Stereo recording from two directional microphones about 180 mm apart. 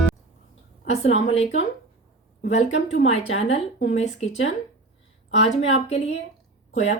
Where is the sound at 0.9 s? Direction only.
35° left (ahead or behind).